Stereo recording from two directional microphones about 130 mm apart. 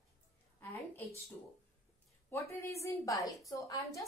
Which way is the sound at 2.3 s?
25° left (ahead or behind).